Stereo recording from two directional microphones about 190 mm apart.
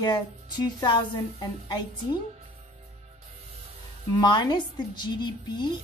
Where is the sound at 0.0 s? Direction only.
25° left (ahead or behind).